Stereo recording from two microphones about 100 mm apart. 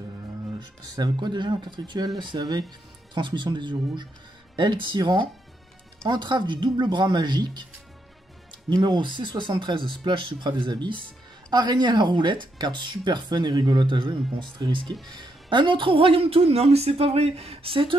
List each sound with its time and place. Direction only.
0.6 s speech: 45° right (ahead or behind)
8.6 s speech: 45° right (ahead or behind)